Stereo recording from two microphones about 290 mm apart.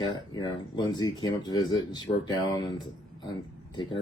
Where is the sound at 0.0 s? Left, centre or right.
Centre.